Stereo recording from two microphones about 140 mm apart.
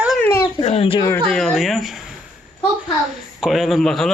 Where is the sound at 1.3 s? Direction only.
Centre (ahead or behind).